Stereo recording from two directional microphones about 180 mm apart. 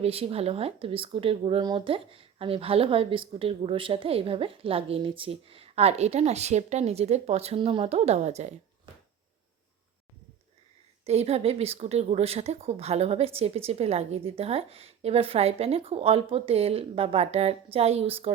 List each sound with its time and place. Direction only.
0.0 s speech: 35° right (ahead or behind)
11.0 s speech: 35° right (ahead or behind)